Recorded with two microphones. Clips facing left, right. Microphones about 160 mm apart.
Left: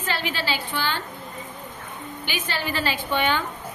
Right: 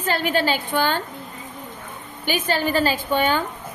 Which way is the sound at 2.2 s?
45° right (ahead or behind).